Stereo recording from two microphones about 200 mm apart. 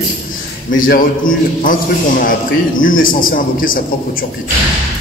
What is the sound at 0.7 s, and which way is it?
A man's voice, 45° left (ahead or behind).